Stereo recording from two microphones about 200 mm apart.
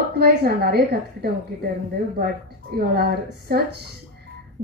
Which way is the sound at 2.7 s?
50° right (ahead or behind).